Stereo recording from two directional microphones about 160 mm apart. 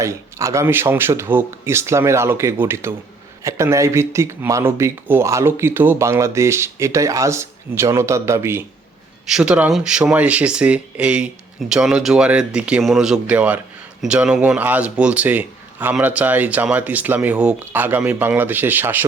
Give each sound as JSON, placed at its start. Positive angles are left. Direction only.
{"t": 0.0, "sound": "speech", "side_deg": -20}
{"t": 9.2, "sound": "speech", "side_deg": -5}